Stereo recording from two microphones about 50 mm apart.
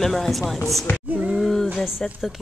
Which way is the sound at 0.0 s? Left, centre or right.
Centre.